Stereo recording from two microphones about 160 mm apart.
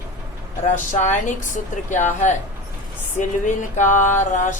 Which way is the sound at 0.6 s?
50° left (ahead or behind).